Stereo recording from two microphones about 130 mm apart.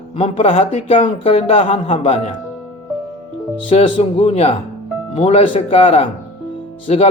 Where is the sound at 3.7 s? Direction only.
45° left (ahead or behind).